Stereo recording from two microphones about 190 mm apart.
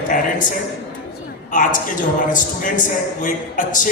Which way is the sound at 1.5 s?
45° left (ahead or behind).